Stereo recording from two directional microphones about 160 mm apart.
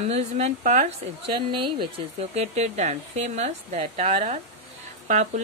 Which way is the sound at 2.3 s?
45° right (ahead or behind).